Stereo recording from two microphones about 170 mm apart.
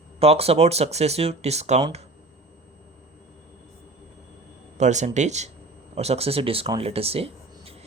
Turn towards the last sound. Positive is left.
turn(degrees=-35)  # may be behind; listen again after turning